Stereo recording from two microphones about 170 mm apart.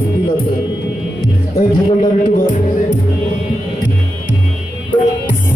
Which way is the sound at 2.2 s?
50° left (ahead or behind).